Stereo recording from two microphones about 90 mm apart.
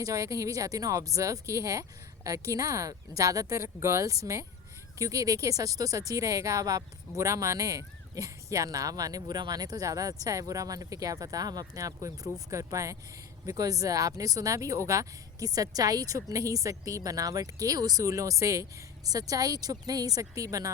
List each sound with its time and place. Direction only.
0.0 s speech: 35° right (ahead or behind)